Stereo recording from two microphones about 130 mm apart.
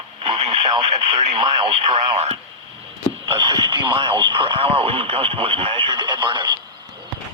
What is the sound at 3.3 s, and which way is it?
Speech, 40° right (ahead or behind).